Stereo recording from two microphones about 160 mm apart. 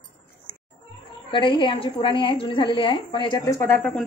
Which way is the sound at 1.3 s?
30° left (ahead or behind).